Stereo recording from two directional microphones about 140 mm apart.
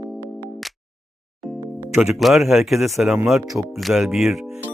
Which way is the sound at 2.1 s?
Centre (ahead or behind).